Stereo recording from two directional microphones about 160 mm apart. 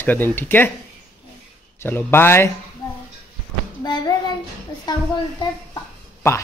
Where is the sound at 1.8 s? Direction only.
15° left (ahead or behind).